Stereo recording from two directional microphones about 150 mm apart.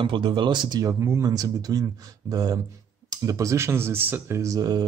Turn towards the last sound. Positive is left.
turn(degrees=-25)  # may be behind; listen again after turning